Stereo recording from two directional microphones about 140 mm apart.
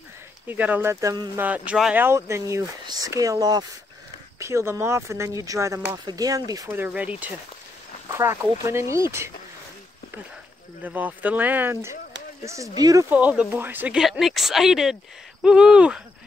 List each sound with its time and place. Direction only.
0.5 s speech: 15° right (ahead or behind)
2.0 s speech: 20° right (ahead or behind)
6.9 s speech: 10° right (ahead or behind)
10.8 s speech: 10° right (ahead or behind)
13.1 s speech: 10° right (ahead or behind)